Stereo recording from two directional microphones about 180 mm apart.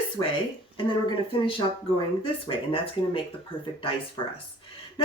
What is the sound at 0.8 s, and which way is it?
Speech, 30° left (ahead or behind).